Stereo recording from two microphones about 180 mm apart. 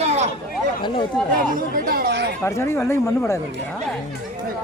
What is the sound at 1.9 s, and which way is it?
Chatter, 60° right (ahead or behind).